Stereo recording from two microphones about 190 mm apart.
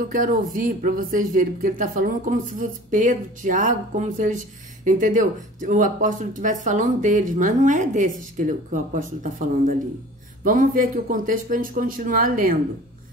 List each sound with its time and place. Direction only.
0.1 s speech: 45° right (ahead or behind)